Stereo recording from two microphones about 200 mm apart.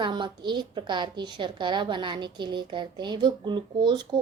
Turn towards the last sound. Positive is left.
turn(degrees=-20)  # may be behind; listen again after turning